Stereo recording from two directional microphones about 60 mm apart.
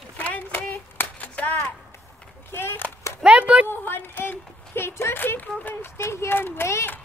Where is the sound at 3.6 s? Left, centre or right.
Left.